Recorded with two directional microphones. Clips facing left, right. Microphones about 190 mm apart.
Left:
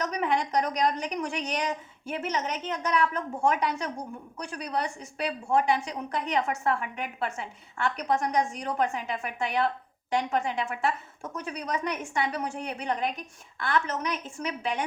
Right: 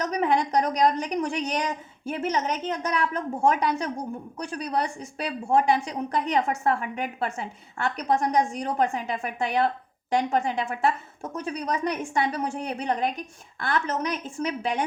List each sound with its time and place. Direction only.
0.0 s a woman's voice: 35° right (ahead or behind)